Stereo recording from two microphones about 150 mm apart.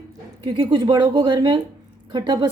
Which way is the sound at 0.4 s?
30° right (ahead or behind).